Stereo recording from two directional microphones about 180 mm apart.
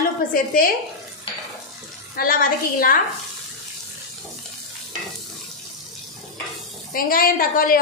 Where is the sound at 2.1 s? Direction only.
55° left (ahead or behind).